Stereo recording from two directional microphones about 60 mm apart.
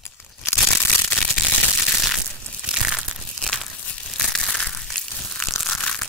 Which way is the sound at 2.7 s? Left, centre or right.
Centre.